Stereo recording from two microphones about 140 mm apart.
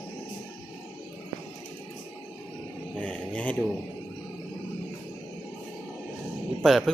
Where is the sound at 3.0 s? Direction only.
10° left (ahead or behind).